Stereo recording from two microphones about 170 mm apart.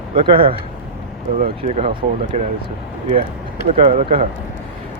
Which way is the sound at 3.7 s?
35° right (ahead or behind).